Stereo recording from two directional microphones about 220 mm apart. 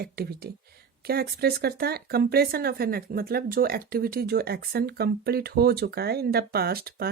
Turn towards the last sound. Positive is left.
turn(degrees=-45)  # may be behind; listen again after turning